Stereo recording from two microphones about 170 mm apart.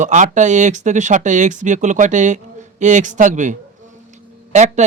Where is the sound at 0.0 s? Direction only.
45° right (ahead or behind).